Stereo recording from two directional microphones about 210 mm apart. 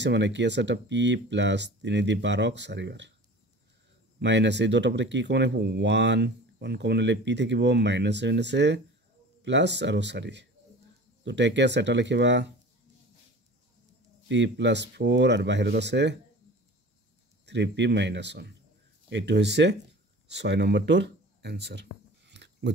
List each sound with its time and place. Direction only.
0.0 s speech: 55° right (ahead or behind)
4.2 s speech: 55° right (ahead or behind)
14.3 s speech: 55° right (ahead or behind)
17.5 s speech: 55° right (ahead or behind)
20.2 s a sound: 55° right (ahead or behind)